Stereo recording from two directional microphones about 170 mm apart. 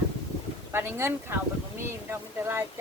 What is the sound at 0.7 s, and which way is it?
Speech, 15° right (ahead or behind).